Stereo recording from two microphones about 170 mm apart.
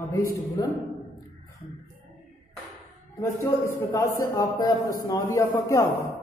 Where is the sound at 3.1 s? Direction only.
15° left (ahead or behind).